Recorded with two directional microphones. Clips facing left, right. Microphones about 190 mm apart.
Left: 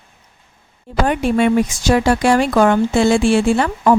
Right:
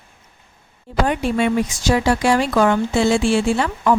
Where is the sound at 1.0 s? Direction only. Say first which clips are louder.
Left 4 dB; 50° left (ahead or behind).